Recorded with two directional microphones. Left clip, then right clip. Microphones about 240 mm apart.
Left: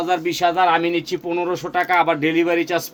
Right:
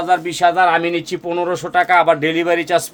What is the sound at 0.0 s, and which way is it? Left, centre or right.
Speech, right.